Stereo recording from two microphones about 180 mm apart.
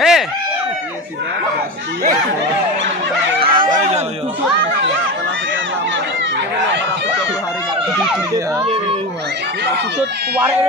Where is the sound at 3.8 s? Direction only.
35° right (ahead or behind).